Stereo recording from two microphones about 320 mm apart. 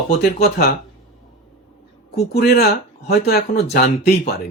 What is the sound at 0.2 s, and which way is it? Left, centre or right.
Speech, left.